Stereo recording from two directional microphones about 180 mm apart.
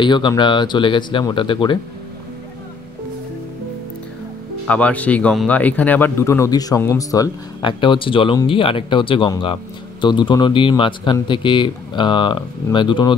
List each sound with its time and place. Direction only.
0.0 s speech: 25° left (ahead or behind)
4.6 s speech: 5° left (ahead or behind); by 13.1 s 25° left (ahead or behind)